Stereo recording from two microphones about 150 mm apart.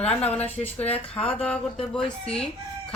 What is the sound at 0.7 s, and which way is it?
Speech, 40° left (ahead or behind).